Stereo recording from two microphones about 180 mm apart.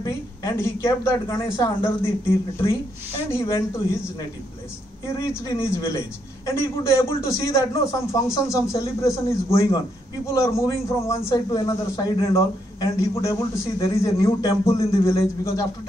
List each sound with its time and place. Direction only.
0.0 s a man's voice: 20° left (ahead or behind)
3.3 s a man's voice: 15° left (ahead or behind)
5.2 s a man's voice: 15° left (ahead or behind)